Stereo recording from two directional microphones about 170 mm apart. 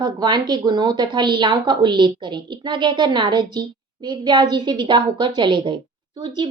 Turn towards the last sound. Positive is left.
turn(degrees=-25)  # may be behind; listen again after turning